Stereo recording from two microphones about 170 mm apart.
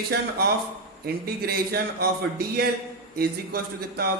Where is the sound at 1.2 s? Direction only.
65° right (ahead or behind).